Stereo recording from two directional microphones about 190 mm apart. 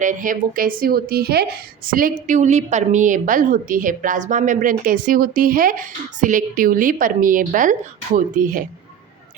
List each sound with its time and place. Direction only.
0.0 s a woman's voice: 45° right (ahead or behind)